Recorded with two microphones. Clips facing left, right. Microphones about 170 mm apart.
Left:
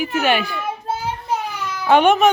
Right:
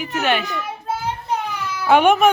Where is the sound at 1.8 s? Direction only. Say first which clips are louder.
Even; 10° right (ahead or behind).